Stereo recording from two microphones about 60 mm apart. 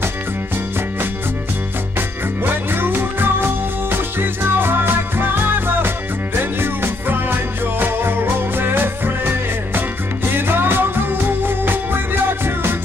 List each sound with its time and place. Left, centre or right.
2.0 s music: right